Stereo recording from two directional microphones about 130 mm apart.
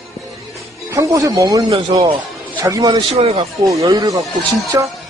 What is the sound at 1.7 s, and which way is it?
Speech, 50° right (ahead or behind).